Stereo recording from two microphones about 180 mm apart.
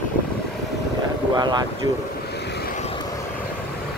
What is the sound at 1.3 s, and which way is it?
Speech, 25° right (ahead or behind).